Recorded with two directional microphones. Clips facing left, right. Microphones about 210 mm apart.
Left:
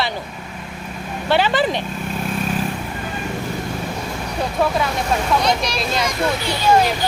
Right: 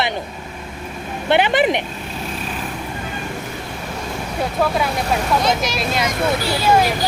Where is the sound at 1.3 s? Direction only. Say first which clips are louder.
Right 2 dB; 20° right (ahead or behind).